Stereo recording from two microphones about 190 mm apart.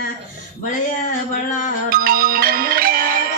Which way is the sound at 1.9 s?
50° right (ahead or behind).